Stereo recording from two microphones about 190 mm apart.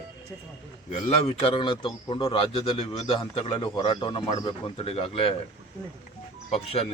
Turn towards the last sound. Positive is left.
turn(degrees=30)  # may be behind; listen again after turning